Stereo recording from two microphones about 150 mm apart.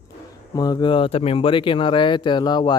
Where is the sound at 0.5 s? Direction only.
25° left (ahead or behind).